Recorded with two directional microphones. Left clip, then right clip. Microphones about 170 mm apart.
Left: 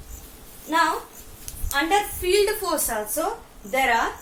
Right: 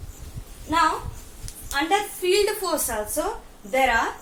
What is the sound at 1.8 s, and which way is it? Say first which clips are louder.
A woman's voice: right 1 dB; 10° right (ahead or behind).